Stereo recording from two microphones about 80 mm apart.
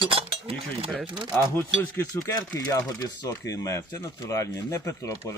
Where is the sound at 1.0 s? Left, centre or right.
Right.